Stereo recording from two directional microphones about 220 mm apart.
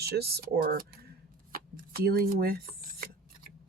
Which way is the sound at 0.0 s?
45° right (ahead or behind).